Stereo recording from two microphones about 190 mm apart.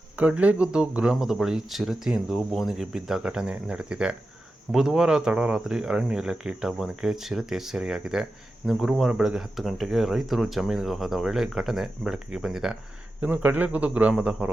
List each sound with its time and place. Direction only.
0.2 s a man's voice: 5° right (ahead or behind)